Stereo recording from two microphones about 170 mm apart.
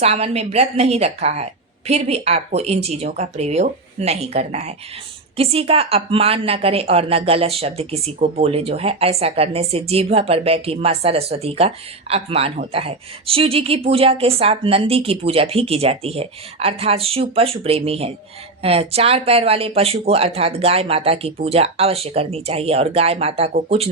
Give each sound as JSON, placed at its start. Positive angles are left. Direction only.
{"t": 0.0, "sound": "a woman's voice", "side_deg": -40}